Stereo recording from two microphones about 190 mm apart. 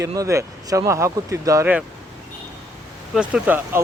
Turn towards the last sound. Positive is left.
turn(degrees=-10)  # may be behind; listen again after turning